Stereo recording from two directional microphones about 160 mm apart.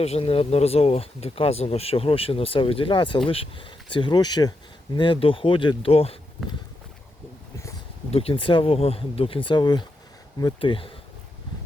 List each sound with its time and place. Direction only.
0.0 s speech: 40° left (ahead or behind)
8.1 s speech: 35° left (ahead or behind)